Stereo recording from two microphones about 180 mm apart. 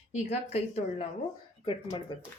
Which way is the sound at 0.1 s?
35° left (ahead or behind).